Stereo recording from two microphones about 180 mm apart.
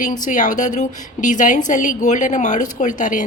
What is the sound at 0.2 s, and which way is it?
A woman's voice, 45° left (ahead or behind).